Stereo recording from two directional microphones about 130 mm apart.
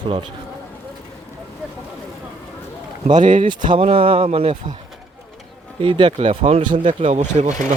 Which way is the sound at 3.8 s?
45° right (ahead or behind).